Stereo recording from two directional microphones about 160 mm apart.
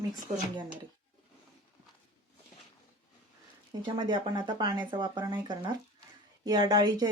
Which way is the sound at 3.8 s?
30° right (ahead or behind).